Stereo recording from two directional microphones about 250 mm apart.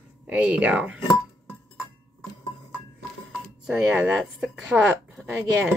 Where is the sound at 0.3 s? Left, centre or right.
Centre.